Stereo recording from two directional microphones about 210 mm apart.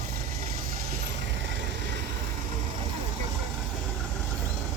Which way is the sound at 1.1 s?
60° right (ahead or behind).